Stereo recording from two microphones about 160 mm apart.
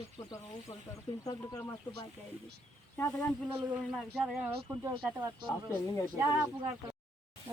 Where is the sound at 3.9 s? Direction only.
Centre (ahead or behind).